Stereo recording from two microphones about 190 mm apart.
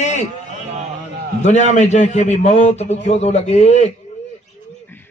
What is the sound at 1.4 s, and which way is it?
A man's voice, 40° left (ahead or behind).